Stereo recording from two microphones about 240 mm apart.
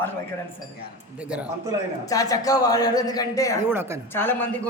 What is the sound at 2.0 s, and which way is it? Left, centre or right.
Speech, centre.